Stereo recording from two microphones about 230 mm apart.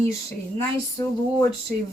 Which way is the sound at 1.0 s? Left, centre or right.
Centre.